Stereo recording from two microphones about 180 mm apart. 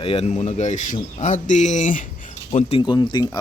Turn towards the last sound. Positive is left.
turn(degrees=25)  # may be behind; listen again after turning